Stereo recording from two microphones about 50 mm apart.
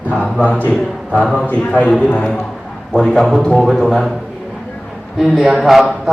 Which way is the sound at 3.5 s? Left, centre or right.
Centre.